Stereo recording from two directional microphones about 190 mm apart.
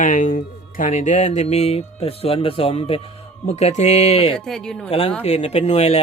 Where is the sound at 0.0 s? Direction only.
45° left (ahead or behind).